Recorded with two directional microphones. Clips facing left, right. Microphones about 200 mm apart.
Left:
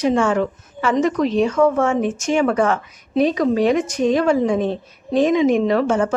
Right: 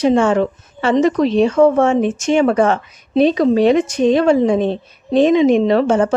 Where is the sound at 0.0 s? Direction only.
25° right (ahead or behind).